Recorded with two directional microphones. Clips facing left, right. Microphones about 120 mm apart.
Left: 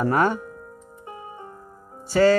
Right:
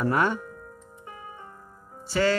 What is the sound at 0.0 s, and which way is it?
Speech, 40° left (ahead or behind).